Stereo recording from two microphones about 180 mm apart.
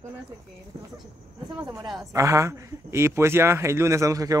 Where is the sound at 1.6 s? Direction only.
20° right (ahead or behind).